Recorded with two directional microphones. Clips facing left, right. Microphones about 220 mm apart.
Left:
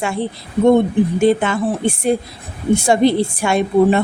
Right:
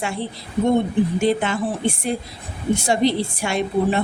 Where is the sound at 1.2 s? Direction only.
50° left (ahead or behind).